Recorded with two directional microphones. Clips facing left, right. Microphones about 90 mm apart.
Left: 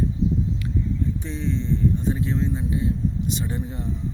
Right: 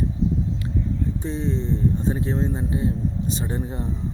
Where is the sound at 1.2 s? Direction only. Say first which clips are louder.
Right 2 dB; 35° right (ahead or behind).